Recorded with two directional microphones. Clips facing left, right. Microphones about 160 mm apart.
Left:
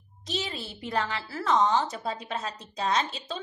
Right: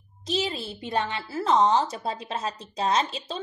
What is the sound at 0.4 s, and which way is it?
A woman's voice, 25° right (ahead or behind).